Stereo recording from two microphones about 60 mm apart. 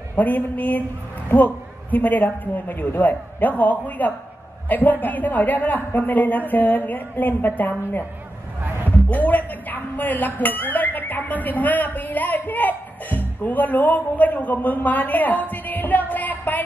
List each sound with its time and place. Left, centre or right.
0.1 s speech: left
9.1 s speech: left
15.5 s music: left